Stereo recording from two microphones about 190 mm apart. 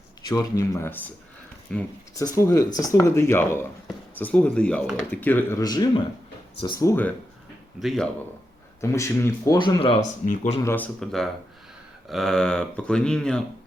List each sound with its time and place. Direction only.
0.3 s speech: 15° left (ahead or behind)
2.1 s speech: 15° left (ahead or behind)
7.8 s speech: centre (ahead or behind)
8.8 s speech: 15° left (ahead or behind); by 10.6 s 35° left (ahead or behind)
10.6 s speech: 15° left (ahead or behind)
11.0 s speech: centre (ahead or behind)